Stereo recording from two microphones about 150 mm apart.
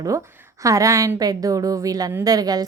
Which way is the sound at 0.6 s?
20° right (ahead or behind).